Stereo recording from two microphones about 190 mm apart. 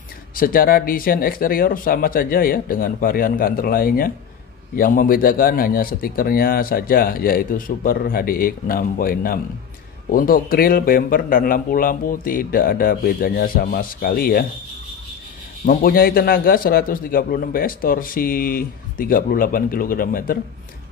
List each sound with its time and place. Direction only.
0.4 s a man's voice: 50° left (ahead or behind)
15.6 s a man's voice: 50° left (ahead or behind)